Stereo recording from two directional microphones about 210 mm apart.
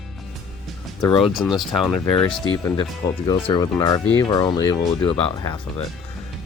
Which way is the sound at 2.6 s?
20° left (ahead or behind).